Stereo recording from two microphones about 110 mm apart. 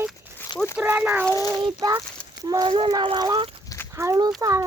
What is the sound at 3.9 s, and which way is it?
Speech, 30° right (ahead or behind).